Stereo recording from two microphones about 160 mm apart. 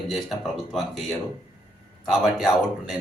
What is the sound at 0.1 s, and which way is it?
Speech, centre (ahead or behind).